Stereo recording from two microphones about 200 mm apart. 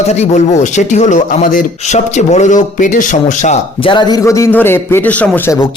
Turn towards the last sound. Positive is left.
turn(degrees=10)  # may be behind; listen again after turning